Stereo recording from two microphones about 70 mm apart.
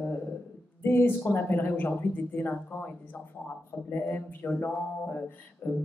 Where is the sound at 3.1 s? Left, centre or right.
Left.